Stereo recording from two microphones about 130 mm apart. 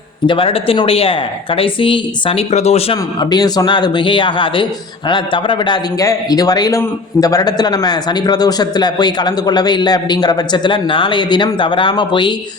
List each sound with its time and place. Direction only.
0.3 s a woman's voice: 45° left (ahead or behind)
2.5 s speech: 55° left (ahead or behind)
3.2 s a man's voice: 30° left (ahead or behind)